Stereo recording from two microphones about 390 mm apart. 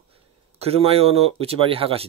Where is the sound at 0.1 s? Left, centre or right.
Centre.